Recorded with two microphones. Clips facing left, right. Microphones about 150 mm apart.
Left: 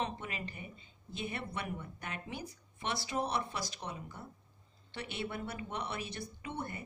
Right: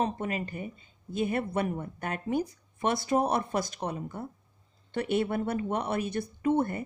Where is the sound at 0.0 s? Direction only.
45° right (ahead or behind).